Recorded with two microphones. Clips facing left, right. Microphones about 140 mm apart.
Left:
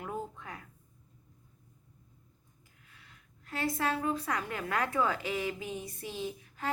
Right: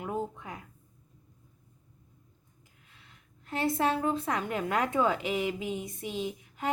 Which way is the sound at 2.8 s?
25° right (ahead or behind).